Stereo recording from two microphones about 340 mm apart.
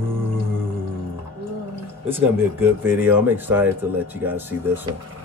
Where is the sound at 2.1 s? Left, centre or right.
Centre.